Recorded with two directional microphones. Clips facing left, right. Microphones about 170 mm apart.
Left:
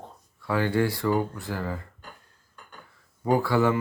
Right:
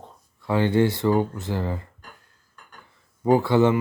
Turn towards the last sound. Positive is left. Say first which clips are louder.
# right 4 dB
turn(degrees=-20)  # may be behind; listen again after turning